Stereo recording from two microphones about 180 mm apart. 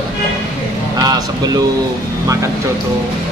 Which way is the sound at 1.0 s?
20° right (ahead or behind).